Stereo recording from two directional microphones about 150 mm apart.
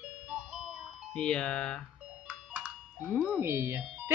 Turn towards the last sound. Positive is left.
turn(degrees=-15)  # may be behind; listen again after turning